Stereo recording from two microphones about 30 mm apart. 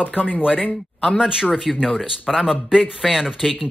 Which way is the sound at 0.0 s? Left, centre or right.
Left.